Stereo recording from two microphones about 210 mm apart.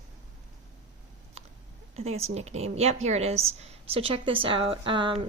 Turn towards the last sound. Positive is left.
turn(degrees=-25)  # may be behind; listen again after turning